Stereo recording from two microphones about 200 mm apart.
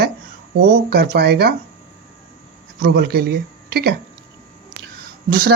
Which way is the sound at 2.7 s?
50° right (ahead or behind).